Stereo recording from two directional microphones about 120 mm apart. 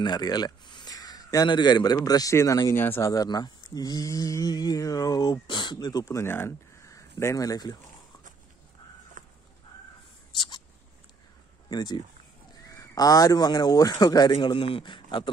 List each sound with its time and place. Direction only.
0.0 s speech: 35° left (ahead or behind); by 3.1 s 20° left (ahead or behind)
3.1 s speech: 30° left (ahead or behind)
6.0 s speech: 20° left (ahead or behind)
9.2 s crow: 90° right
10.3 s a sound: 40° left (ahead or behind)
11.7 s speech: 35° left (ahead or behind)